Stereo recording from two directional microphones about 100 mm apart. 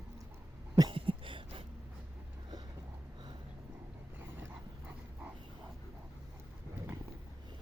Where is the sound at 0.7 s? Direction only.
55° right (ahead or behind).